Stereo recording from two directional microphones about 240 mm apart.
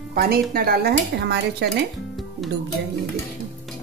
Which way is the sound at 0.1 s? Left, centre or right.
Right.